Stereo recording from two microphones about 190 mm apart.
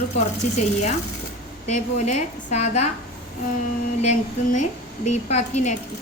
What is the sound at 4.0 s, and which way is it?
Speech, 40° left (ahead or behind).